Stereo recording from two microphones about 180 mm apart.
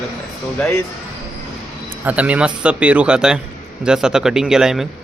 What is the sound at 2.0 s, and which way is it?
Speech, 10° right (ahead or behind).